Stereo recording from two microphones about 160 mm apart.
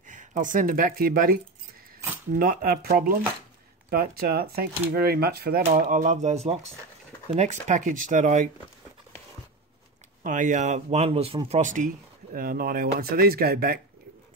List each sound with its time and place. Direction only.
0.0 s speech: 50° right (ahead or behind)
10.2 s speech: 55° right (ahead or behind); by 13.7 s 70° right (ahead or behind)